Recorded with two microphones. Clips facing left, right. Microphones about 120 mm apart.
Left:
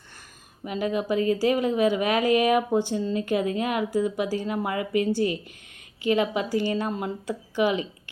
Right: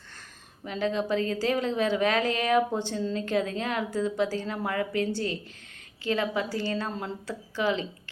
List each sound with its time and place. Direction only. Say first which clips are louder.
0.6 s a woman's voice: left 2 dB; 10° left (ahead or behind)